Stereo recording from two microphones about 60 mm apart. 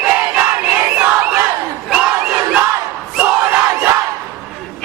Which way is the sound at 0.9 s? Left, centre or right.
Right.